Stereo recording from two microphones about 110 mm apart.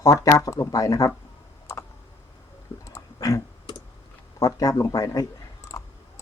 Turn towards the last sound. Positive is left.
turn(degrees=35)  # may be behind; listen again after turning